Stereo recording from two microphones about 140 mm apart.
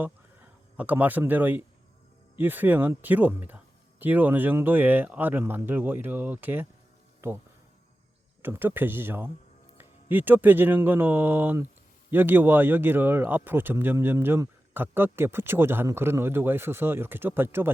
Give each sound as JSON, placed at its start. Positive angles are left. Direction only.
{"t": 0.8, "sound": "speech", "side_deg": -10}